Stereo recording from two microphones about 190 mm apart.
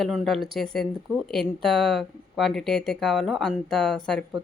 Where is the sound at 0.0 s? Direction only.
Centre (ahead or behind).